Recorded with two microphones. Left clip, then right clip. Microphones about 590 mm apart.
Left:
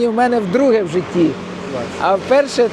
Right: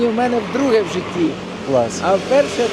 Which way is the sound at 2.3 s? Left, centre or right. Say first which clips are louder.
Left 2 dB; left.